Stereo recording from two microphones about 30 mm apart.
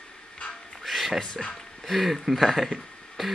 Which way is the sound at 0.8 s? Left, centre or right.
Centre.